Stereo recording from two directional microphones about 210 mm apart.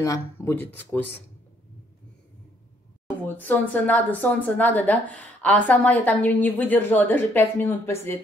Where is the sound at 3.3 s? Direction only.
10° left (ahead or behind).